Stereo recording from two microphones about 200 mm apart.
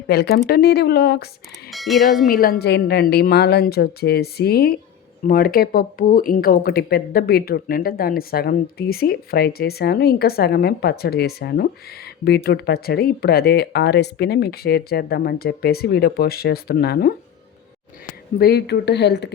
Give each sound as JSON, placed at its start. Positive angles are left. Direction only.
{"t": 0.1, "sound": "speech", "side_deg": 55}
{"t": 1.7, "sound": "speech", "side_deg": 0}
{"t": 2.2, "sound": "speech", "side_deg": 45}
{"t": 18.3, "sound": "speech", "side_deg": 50}